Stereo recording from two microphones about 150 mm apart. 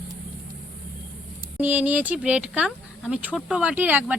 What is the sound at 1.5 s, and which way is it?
Speech, 10° right (ahead or behind).